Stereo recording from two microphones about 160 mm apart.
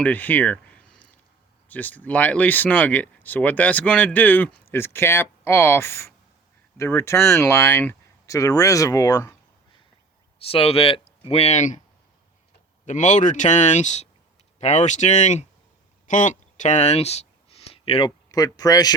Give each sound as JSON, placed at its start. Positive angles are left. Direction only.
{"t": 0.0, "sound": "speech", "side_deg": 10}
{"t": 10.4, "sound": "speech", "side_deg": 40}
{"t": 12.8, "sound": "speech", "side_deg": 50}
{"t": 16.0, "sound": "a sound", "side_deg": 50}
{"t": 18.3, "sound": "speech", "side_deg": 25}